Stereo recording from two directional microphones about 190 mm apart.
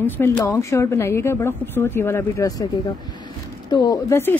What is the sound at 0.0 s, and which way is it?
A woman's voice, 15° left (ahead or behind).